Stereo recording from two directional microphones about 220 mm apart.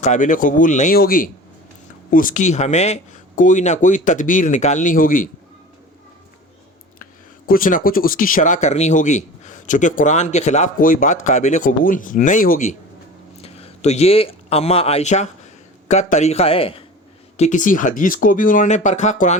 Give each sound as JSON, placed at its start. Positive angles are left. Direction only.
{"t": 0.0, "sound": "speech", "side_deg": 35}
{"t": 7.0, "sound": "speech", "side_deg": 40}